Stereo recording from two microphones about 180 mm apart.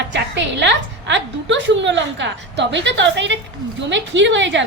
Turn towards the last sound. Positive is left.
turn(degrees=-90)